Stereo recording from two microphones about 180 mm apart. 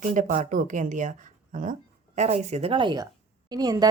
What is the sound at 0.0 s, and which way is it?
A woman's voice, 45° right (ahead or behind).